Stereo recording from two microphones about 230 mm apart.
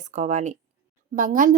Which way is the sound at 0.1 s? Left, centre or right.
Right.